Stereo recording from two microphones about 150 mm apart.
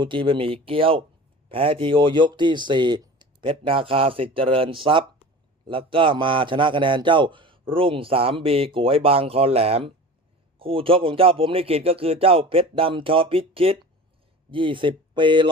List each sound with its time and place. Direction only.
0.0 s a man's voice: 35° right (ahead or behind)